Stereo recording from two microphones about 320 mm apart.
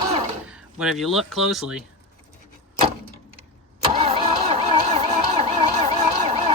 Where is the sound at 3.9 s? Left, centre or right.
Centre.